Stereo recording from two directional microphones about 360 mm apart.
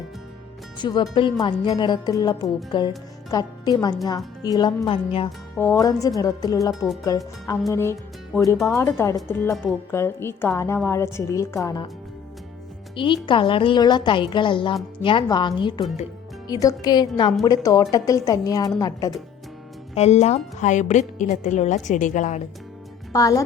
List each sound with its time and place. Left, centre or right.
0.8 s speech: centre
13.2 s a woman's voice: centre
23.1 s speech: centre